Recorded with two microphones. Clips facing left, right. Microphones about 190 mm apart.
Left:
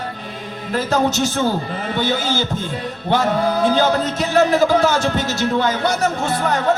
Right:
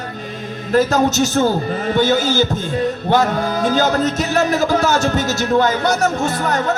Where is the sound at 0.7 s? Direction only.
45° right (ahead or behind).